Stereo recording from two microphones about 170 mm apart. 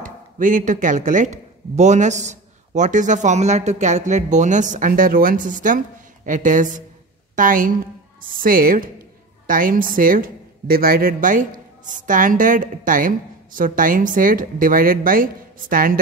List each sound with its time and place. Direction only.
0.0 s a woman's voice: 50° right (ahead or behind)